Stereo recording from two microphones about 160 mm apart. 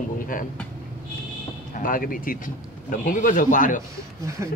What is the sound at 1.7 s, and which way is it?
Speech, 60° left (ahead or behind).